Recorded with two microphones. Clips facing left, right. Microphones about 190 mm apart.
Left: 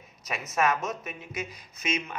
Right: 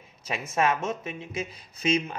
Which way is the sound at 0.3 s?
25° right (ahead or behind).